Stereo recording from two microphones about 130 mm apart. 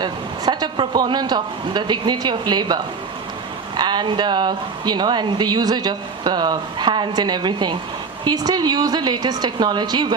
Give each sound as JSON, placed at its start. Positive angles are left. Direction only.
{"t": 0.0, "sound": "speech", "side_deg": -30}